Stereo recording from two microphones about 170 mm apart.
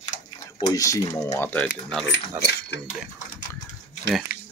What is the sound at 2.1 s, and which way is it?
Speech, 90° left.